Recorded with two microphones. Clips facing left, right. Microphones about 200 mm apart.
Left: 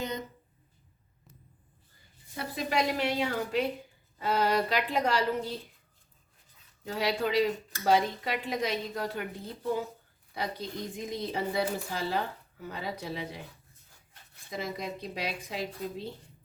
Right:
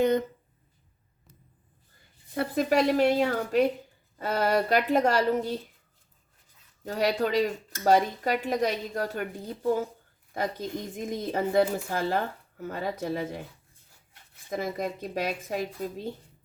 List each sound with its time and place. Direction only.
0.0 s a sound: 55° right (ahead or behind)
2.3 s a woman's voice: 50° right (ahead or behind)
6.8 s a woman's voice: 45° right (ahead or behind)
10.3 s a woman's voice: 45° right (ahead or behind)
14.5 s a woman's voice: 50° right (ahead or behind)